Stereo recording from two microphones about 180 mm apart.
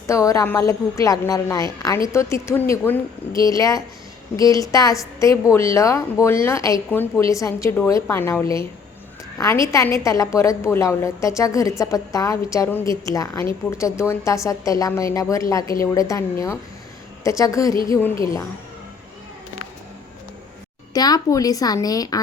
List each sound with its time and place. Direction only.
0.1 s a woman's voice: 20° left (ahead or behind)
20.9 s speech: 20° left (ahead or behind)